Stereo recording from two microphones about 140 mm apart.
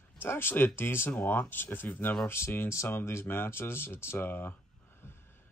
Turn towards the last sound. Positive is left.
turn(degrees=15)  # may be behind; listen again after turning